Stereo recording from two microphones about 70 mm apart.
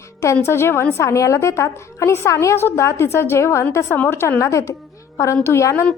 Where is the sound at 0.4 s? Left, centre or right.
Left.